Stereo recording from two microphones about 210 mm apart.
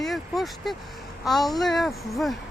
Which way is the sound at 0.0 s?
Centre (ahead or behind).